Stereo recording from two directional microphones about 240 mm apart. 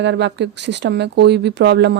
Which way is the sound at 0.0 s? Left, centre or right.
Right.